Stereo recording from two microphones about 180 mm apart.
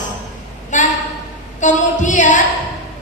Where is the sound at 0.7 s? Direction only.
45° left (ahead or behind).